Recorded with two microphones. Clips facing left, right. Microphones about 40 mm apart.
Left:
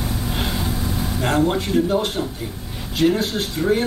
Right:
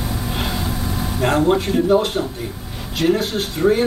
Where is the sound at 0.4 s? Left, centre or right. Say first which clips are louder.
Even; centre.